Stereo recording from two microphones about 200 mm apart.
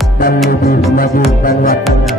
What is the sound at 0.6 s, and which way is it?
Music, 50° left (ahead or behind).